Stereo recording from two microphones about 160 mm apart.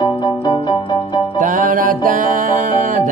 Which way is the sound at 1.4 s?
55° right (ahead or behind).